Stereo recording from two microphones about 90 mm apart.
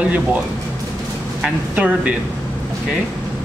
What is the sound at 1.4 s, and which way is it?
Speech, 15° right (ahead or behind).